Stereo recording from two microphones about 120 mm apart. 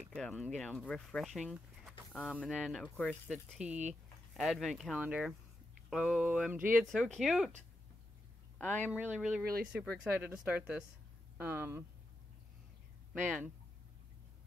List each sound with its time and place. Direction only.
0.1 s speech: 10° left (ahead or behind)
1.2 s speech: 5° right (ahead or behind)
2.5 s a sound: 5° right (ahead or behind)
2.8 s speech: 10° left (ahead or behind)
3.5 s speech: 5° right (ahead or behind)
4.3 s a sound: centre (ahead or behind)
8.5 s speech: 15° left (ahead or behind)
8.9 s speech: 10° right (ahead or behind)
13.1 s speech: 10° right (ahead or behind)